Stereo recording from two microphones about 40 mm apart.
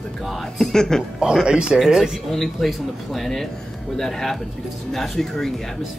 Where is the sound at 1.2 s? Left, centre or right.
Centre.